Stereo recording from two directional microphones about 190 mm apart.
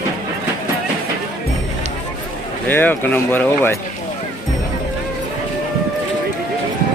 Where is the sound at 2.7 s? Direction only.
10° left (ahead or behind).